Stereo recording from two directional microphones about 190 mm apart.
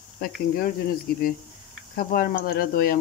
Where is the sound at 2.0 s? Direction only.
50° left (ahead or behind).